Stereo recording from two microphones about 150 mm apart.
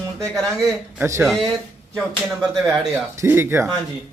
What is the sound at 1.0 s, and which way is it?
Speech, 15° right (ahead or behind).